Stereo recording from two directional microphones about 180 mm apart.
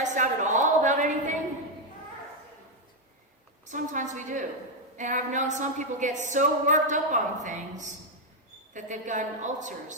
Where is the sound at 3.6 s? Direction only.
45° right (ahead or behind).